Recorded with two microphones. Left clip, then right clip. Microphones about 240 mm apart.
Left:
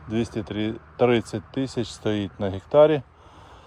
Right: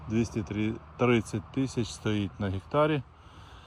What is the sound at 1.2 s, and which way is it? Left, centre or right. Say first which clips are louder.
Speech: left 4 dB; left.